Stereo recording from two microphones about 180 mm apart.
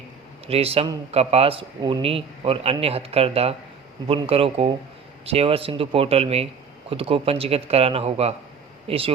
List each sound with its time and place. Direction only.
0.4 s a man's voice: 35° right (ahead or behind)